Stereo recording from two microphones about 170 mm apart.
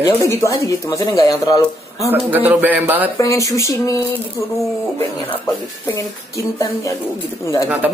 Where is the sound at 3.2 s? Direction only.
20° left (ahead or behind).